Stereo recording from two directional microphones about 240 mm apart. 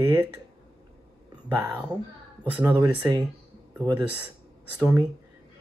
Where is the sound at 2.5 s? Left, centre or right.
Centre.